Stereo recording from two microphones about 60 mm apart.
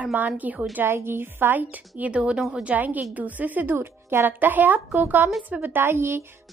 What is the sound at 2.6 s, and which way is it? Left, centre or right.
A woman's voice, right.